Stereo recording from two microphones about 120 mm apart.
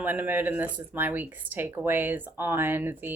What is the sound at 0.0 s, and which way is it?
Speech, 15° right (ahead or behind).